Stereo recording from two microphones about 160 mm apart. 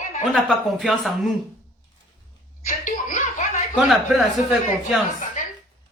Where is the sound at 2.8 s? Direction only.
55° left (ahead or behind).